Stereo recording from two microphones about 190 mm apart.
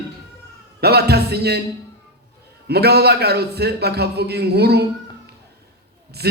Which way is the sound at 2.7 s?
60° right (ahead or behind).